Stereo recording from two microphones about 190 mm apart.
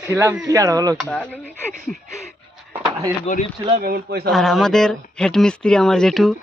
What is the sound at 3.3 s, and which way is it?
Speech, 40° left (ahead or behind).